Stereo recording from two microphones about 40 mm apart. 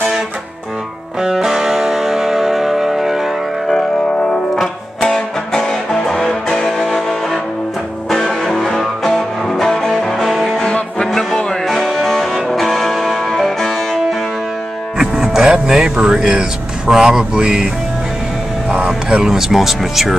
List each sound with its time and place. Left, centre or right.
1.2 s music: centre
4.6 s music: centre
15.0 s music: centre
15.5 s a sound: centre
16.9 s speech: centre
18.9 s a sound: right
19.3 s speech: centre